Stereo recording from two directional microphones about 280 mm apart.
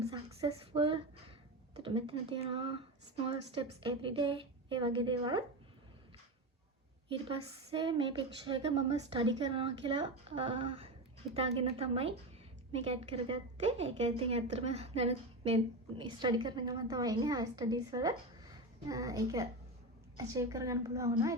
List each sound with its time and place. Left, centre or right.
0.0 s a sound: right
1.7 s a woman's voice: centre
7.3 s a woman's voice: centre